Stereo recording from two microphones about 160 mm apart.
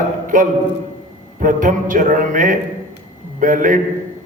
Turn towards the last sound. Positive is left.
turn(degrees=-55)  # may be behind; listen again after turning